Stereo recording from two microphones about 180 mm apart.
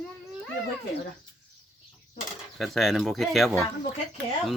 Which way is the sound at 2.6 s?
Centre (ahead or behind).